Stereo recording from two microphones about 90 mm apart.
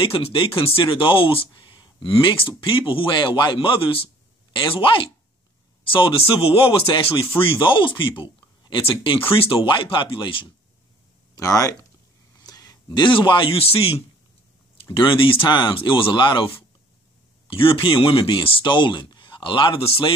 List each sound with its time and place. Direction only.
0.0 s a man's voice: 75° left (ahead or behind)
7.3 s speech: 70° left (ahead or behind); by 9.6 s 90° left
9.7 s speech: 70° left (ahead or behind)
11.3 s a man's voice: 40° left (ahead or behind); by 13.9 s 90° left
15.0 s speech: 70° left (ahead or behind)
17.5 s speech: 80° left